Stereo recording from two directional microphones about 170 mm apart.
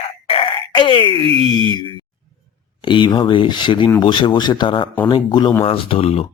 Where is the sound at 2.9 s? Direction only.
25° left (ahead or behind).